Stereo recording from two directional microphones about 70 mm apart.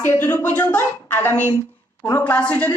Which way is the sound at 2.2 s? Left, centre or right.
Centre.